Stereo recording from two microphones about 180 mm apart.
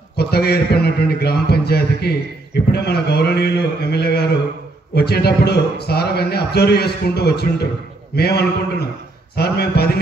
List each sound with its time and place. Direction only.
0.1 s a man's voice: 65° left (ahead or behind)